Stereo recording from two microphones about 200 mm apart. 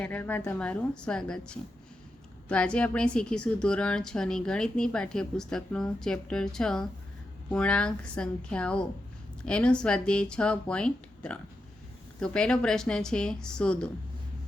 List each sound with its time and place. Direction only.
0.0 s a woman's voice: 10° left (ahead or behind)